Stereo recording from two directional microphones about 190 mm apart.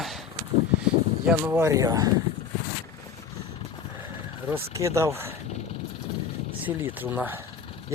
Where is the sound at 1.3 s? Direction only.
10° right (ahead or behind).